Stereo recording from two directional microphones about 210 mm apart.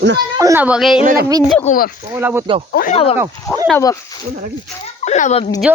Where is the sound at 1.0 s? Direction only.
40° right (ahead or behind).